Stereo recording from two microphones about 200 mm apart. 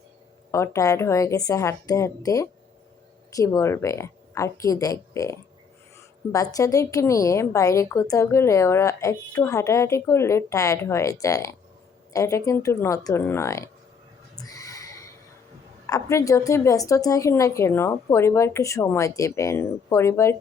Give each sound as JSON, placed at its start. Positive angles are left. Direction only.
{"t": 0.5, "sound": "a woman's voice", "side_deg": 15}
{"t": 14.4, "sound": "a sound", "side_deg": 15}
{"t": 15.9, "sound": "a woman's voice", "side_deg": 15}